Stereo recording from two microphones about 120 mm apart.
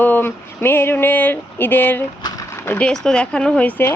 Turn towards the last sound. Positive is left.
turn(degrees=15)  # may be behind; listen again after turning